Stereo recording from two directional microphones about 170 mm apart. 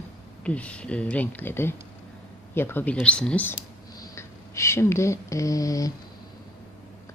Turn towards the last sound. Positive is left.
turn(degrees=20)  # may be behind; listen again after turning